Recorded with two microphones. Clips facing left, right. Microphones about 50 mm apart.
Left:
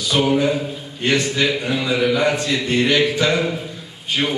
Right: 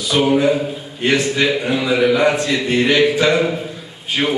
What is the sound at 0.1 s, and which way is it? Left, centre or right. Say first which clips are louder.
A man's voice: right 3 dB; centre.